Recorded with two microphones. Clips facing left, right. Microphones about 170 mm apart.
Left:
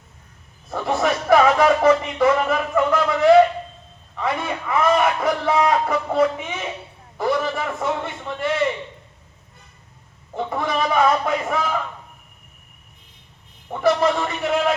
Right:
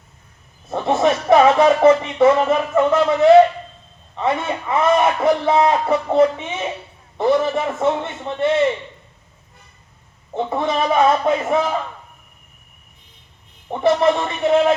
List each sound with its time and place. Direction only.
0.7 s speech: 25° right (ahead or behind)
4.2 s a sound: 25° right (ahead or behind)
4.7 s a man's voice: 25° right (ahead or behind)
10.3 s a man's voice: 25° right (ahead or behind)
13.8 s a man's voice: 25° right (ahead or behind)